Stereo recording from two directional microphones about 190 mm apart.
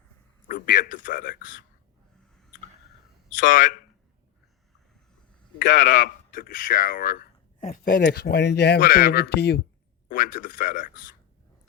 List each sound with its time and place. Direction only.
0.4 s a man's voice: 50° left (ahead or behind)
3.3 s speech: 45° left (ahead or behind)
5.6 s speech: 55° left (ahead or behind)
10.1 s speech: 45° left (ahead or behind)